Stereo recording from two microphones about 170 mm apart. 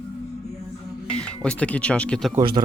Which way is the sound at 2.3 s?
25° right (ahead or behind).